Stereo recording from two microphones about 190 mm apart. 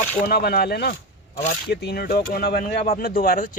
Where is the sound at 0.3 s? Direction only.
55° left (ahead or behind).